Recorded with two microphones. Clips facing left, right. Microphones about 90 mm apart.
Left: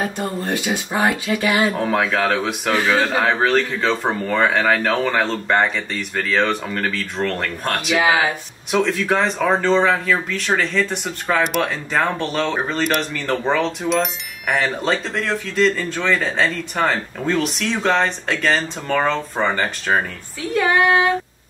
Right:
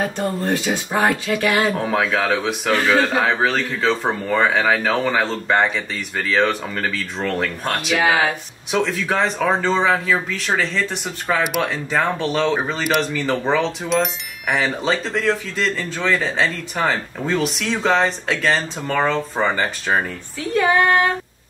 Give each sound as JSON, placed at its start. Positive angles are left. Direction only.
{"t": 0.7, "sound": "speech", "side_deg": 5}
{"t": 8.0, "sound": "speech", "side_deg": 15}
{"t": 8.7, "sound": "speech", "side_deg": 0}
{"t": 20.5, "sound": "female singing", "side_deg": 5}